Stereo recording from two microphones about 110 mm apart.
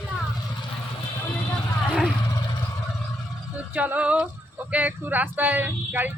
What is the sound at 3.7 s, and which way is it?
Speech, 15° right (ahead or behind).